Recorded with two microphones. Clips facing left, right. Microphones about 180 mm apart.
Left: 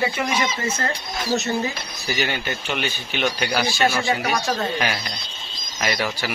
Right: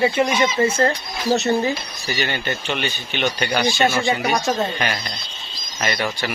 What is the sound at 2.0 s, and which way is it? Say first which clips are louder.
A man's voice: even; 5° left (ahead or behind).